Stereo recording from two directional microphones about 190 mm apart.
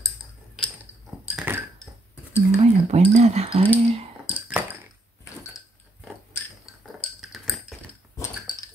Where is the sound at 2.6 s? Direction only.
35° right (ahead or behind).